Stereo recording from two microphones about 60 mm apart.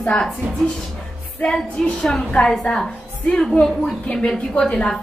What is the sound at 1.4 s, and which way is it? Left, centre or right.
A woman's voice, centre.